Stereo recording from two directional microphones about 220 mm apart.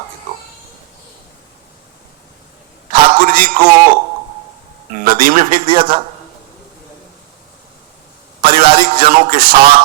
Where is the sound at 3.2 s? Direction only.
40° right (ahead or behind).